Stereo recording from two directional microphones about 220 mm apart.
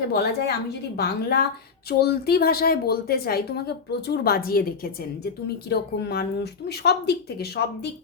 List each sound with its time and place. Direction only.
0.1 s a woman's voice: 50° left (ahead or behind)